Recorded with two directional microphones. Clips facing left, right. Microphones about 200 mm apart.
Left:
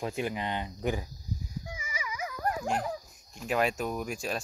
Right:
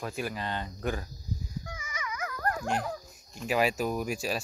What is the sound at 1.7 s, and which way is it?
Dog, 10° left (ahead or behind).